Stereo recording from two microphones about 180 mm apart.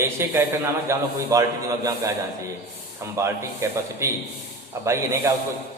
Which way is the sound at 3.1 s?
15° right (ahead or behind).